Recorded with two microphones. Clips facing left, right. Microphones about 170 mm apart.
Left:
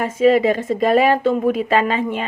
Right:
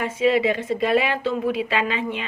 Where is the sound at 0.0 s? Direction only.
45° left (ahead or behind).